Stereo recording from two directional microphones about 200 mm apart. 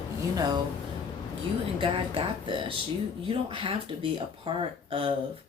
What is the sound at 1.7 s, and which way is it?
Speech, 25° right (ahead or behind).